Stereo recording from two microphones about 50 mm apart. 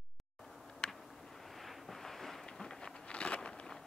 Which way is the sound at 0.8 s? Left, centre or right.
Left.